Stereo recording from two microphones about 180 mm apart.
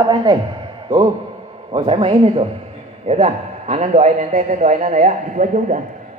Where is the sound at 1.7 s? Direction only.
30° right (ahead or behind).